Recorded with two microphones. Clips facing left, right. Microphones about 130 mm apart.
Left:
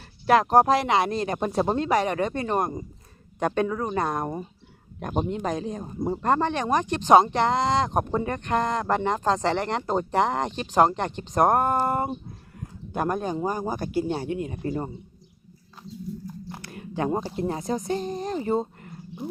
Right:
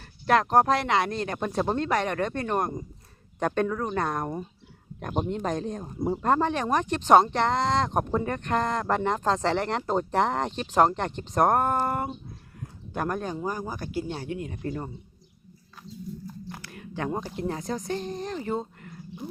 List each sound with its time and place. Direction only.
0.3 s speech: 10° left (ahead or behind)
13.3 s speech: 25° left (ahead or behind)
16.2 s biting: 20° left (ahead or behind)
16.9 s speech: 20° left (ahead or behind)
18.3 s a sound: 30° left (ahead or behind)